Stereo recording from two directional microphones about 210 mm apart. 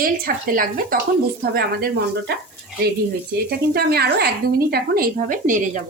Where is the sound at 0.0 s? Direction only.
45° right (ahead or behind).